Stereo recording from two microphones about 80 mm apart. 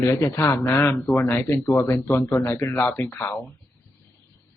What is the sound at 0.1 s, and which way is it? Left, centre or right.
Speech, left.